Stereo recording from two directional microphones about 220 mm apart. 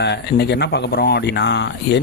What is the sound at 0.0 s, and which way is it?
Speech, 50° left (ahead or behind).